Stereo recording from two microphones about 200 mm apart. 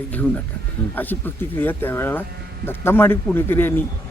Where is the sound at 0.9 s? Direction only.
10° left (ahead or behind).